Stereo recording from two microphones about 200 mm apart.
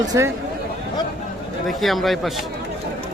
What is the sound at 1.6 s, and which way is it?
Speech, centre (ahead or behind).